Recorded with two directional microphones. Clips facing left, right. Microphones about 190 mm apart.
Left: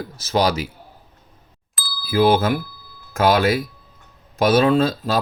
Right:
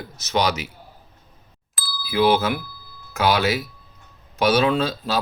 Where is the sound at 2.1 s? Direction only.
50° left (ahead or behind).